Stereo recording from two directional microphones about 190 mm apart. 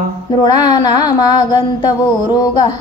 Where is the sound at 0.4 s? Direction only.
20° left (ahead or behind).